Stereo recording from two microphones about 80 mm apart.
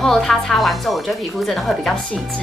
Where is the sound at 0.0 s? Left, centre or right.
Centre.